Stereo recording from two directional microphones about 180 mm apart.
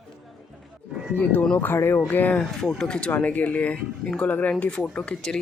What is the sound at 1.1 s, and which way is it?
Speech, 10° left (ahead or behind).